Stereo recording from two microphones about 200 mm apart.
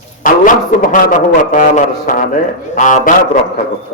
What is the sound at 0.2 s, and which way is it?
A man's voice, 40° left (ahead or behind).